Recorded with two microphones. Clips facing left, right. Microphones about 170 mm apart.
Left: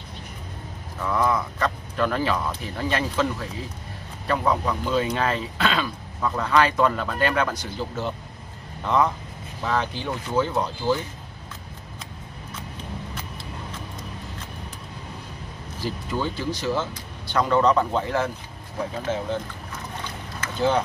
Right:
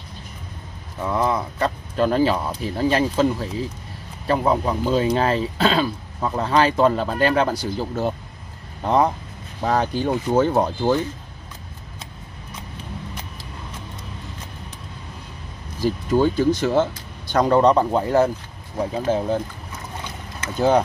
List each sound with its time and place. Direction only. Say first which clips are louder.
1.0 s speech: right 1 dB; 25° right (ahead or behind); by 11.0 s 50° right (ahead or behind)
16.1 s speech: right 11 dB; 45° right (ahead or behind)
20.5 s speech: right 5 dB; 40° right (ahead or behind)